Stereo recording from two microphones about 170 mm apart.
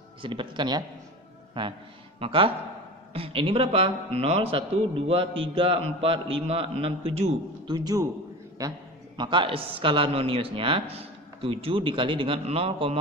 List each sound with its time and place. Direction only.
0.2 s a woman's voice: 30° right (ahead or behind)